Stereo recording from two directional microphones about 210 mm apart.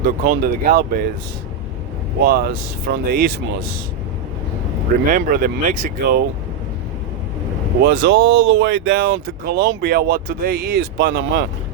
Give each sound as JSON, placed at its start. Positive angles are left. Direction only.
{"t": 0.0, "sound": "speech", "side_deg": -45}
{"t": 2.2, "sound": "speech", "side_deg": -45}
{"t": 5.0, "sound": "speech", "side_deg": -40}
{"t": 7.8, "sound": "speech", "side_deg": -50}
{"t": 8.1, "sound": "speech", "side_deg": -70}
{"t": 8.5, "sound": "speech", "side_deg": -55}